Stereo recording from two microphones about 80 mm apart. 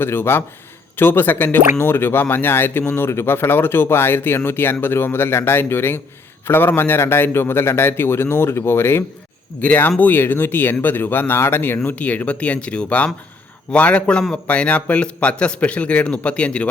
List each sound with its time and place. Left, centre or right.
0.0 s a man's voice: left; by 16.6 s centre